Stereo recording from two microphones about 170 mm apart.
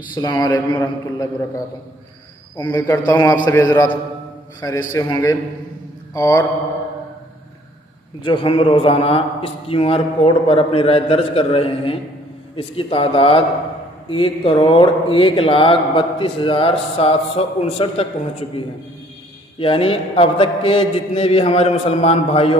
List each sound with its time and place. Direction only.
0.1 s a man's voice: 25° left (ahead or behind)
8.2 s speech: 30° left (ahead or behind)
19.6 s speech: 35° left (ahead or behind)